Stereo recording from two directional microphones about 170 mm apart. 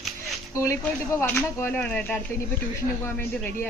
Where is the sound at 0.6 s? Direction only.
15° left (ahead or behind).